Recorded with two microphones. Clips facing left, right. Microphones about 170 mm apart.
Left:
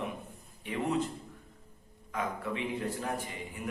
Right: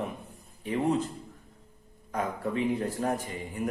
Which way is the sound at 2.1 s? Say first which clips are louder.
Right 4 dB; 40° right (ahead or behind).